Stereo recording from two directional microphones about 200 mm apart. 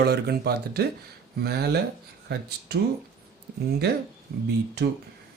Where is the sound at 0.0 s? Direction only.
55° right (ahead or behind).